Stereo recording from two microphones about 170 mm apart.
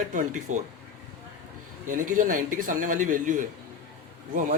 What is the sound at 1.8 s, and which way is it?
Speech, 50° right (ahead or behind).